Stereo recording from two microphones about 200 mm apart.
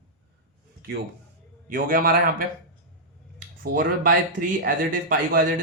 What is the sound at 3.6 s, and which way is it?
Speech, 45° right (ahead or behind).